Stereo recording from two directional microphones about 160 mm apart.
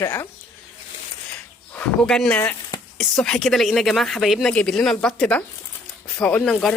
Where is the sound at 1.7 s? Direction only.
5° left (ahead or behind).